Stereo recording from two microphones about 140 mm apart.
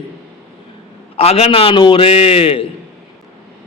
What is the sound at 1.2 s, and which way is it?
A man's voice, 45° left (ahead or behind).